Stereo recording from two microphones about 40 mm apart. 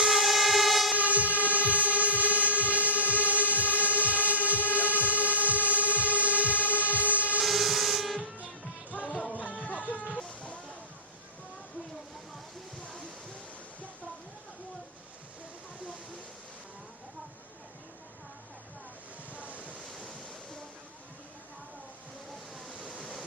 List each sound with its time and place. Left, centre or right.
0.1 s train: centre
0.9 s train: right
7.4 s music: centre
8.9 s music: left
19.3 s waves: right
22.9 s a sound: left